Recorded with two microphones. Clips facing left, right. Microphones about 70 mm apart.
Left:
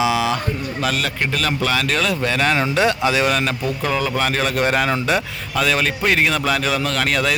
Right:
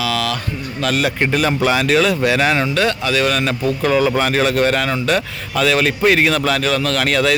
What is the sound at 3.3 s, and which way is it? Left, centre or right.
Speech, centre.